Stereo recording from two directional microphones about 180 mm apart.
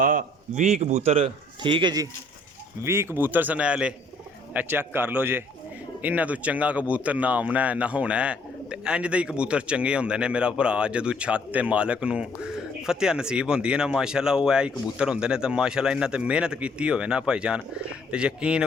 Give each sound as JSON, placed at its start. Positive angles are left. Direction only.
{"t": 0.0, "sound": "a man's voice", "side_deg": -50}